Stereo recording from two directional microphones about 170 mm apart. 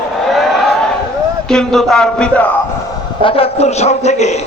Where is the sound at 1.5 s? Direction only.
5° left (ahead or behind).